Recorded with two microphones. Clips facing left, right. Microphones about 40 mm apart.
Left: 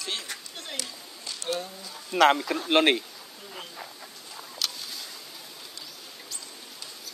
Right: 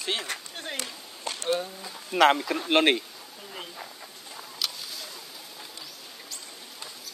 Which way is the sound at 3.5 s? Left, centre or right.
Centre.